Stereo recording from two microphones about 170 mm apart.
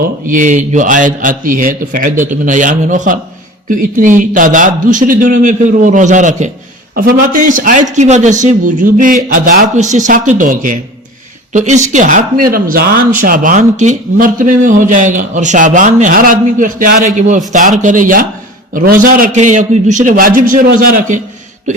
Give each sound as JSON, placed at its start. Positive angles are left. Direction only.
{"t": 0.3, "sound": "speech", "side_deg": -50}
{"t": 6.9, "sound": "speech", "side_deg": -55}